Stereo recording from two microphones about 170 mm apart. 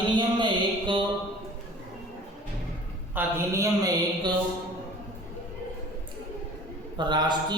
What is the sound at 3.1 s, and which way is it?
Speech, 15° right (ahead or behind).